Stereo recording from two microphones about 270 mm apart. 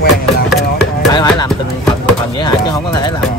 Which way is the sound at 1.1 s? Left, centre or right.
Centre.